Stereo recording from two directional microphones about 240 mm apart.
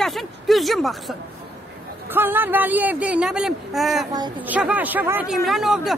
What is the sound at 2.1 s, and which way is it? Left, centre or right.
Speech, centre.